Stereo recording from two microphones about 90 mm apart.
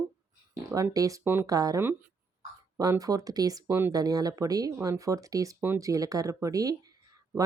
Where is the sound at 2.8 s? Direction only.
40° right (ahead or behind).